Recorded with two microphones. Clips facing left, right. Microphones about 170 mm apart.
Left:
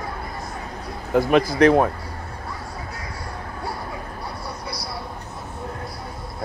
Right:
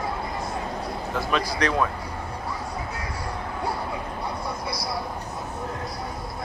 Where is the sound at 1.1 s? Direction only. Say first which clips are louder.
Left 10 dB; 50° left (ahead or behind).